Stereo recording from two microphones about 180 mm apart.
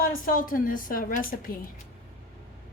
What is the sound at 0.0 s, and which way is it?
A woman's voice, 50° left (ahead or behind).